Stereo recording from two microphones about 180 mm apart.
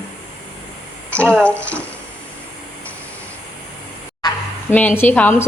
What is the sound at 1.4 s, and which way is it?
Speech, 5° left (ahead or behind).